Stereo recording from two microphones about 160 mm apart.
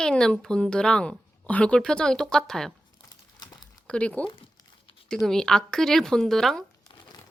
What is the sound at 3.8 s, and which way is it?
Speech, 5° left (ahead or behind).